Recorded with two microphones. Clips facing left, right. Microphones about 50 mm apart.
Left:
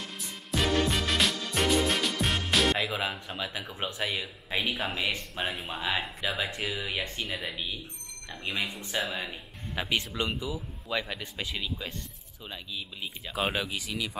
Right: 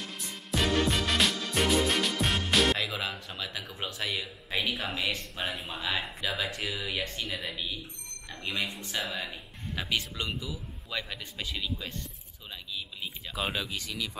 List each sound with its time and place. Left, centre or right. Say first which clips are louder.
0.5 s music: even; centre
2.8 s speech: left 2 dB; centre
8.9 s speech: left 3 dB; centre
9.2 s speech: left 1 dB; centre
13.3 s speech: left 3 dB; centre